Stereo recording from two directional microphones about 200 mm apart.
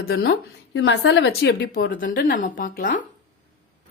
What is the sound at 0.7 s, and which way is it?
A woman's voice, 65° left (ahead or behind).